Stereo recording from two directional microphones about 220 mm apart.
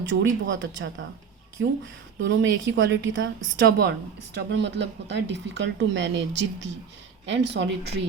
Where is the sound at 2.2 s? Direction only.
55° right (ahead or behind).